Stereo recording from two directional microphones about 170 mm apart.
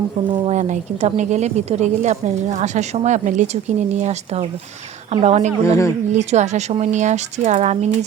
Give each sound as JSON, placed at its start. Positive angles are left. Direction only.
{"t": 0.3, "sound": "speech", "side_deg": -30}
{"t": 0.5, "sound": "a woman's voice", "side_deg": -45}
{"t": 5.6, "sound": "speech", "side_deg": 15}
{"t": 6.1, "sound": "speech", "side_deg": -40}